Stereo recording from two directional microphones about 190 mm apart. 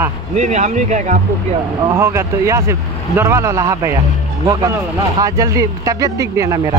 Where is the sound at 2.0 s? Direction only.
15° right (ahead or behind).